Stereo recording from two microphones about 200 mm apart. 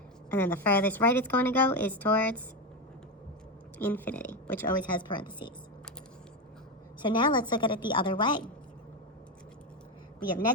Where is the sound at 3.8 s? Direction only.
10° left (ahead or behind).